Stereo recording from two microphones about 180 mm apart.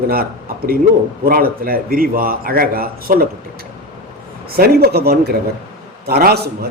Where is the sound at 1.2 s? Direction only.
55° right (ahead or behind).